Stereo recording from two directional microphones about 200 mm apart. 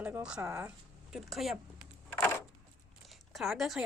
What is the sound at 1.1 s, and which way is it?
Speech, centre (ahead or behind).